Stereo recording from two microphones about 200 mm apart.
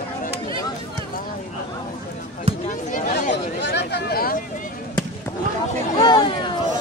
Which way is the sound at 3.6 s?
60° left (ahead or behind).